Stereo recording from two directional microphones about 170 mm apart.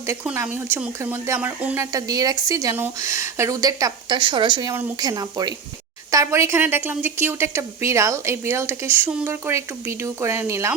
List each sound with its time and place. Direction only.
0.3 s a woman's voice: 10° right (ahead or behind)